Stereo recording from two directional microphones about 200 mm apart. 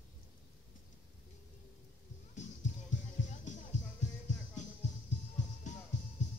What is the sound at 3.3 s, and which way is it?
Music, 35° left (ahead or behind).